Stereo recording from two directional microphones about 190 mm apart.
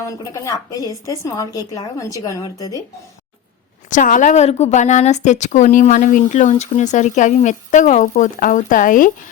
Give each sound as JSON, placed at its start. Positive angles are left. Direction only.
{"t": 0.0, "sound": "speech", "side_deg": 15}
{"t": 3.8, "sound": "a woman's voice", "side_deg": 45}